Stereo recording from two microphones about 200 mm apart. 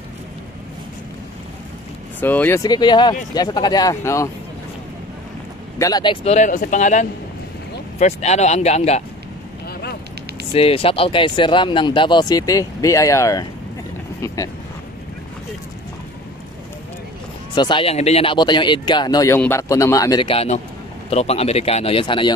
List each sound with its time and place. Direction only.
2.1 s speech: 10° left (ahead or behind)
5.8 s speech: 20° left (ahead or behind)
6.2 s a man's voice: 35° left (ahead or behind)
9.7 s vehicle: 50° left (ahead or behind)
10.5 s speech: 30° left (ahead or behind)
17.6 s a man's voice: 25° left (ahead or behind)